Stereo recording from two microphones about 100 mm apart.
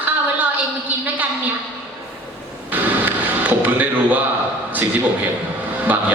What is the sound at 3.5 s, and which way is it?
Speech, 15° right (ahead or behind).